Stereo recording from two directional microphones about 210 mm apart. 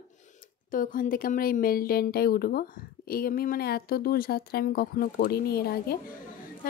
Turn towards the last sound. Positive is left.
turn(degrees=45)  # may be behind; listen again after turning